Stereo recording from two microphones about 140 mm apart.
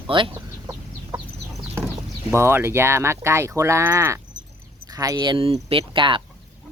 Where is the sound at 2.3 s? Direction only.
20° right (ahead or behind).